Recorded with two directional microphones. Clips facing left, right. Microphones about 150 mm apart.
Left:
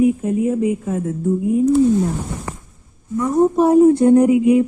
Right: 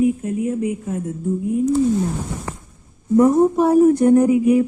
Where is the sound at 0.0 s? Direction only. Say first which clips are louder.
Left 3 dB; 90° left.